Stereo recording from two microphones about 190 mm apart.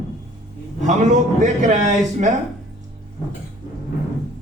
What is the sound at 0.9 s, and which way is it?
A man's voice, 40° right (ahead or behind).